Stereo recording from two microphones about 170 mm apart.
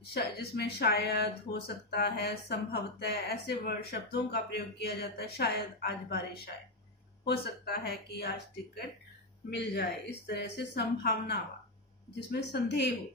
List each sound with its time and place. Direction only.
0.1 s speech: 75° left (ahead or behind)
9.5 s speech: 85° left